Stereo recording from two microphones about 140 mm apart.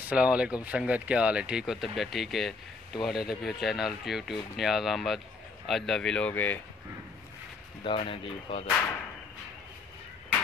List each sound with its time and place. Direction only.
0.1 s speech: 10° right (ahead or behind); by 6.6 s 10° left (ahead or behind)
7.8 s speech: 40° left (ahead or behind)